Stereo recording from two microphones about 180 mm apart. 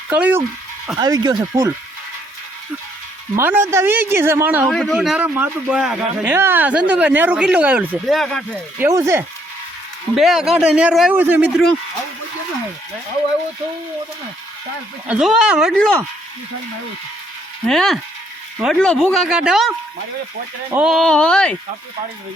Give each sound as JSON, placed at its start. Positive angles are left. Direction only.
{"t": 0.1, "sound": "speech", "side_deg": -10}
{"t": 0.9, "sound": "speech", "side_deg": -20}
{"t": 3.3, "sound": "speech", "side_deg": -15}
{"t": 4.6, "sound": "a man's voice", "side_deg": 0}
{"t": 8.8, "sound": "speech", "side_deg": -15}
{"t": 10.2, "sound": "a man's voice", "side_deg": 0}
{"t": 15.0, "sound": "a man's voice", "side_deg": -5}
{"t": 17.7, "sound": "a man's voice", "side_deg": 0}